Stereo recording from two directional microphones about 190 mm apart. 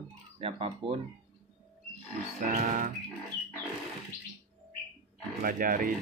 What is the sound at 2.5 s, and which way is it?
Speech, 40° right (ahead or behind).